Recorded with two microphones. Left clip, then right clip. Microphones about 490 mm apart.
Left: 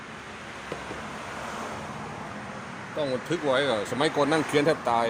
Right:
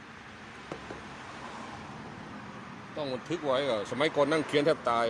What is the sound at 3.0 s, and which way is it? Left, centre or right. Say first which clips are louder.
Speech: left 6 dB; right.